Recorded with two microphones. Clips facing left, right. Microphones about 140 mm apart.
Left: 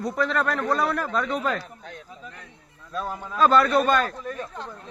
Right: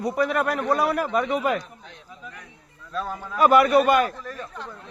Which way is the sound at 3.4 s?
15° right (ahead or behind).